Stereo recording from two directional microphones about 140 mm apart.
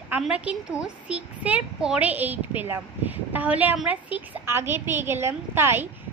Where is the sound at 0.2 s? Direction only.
5° right (ahead or behind).